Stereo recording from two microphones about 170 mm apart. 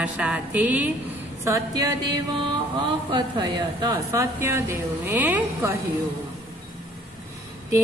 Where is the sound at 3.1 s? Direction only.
25° right (ahead or behind).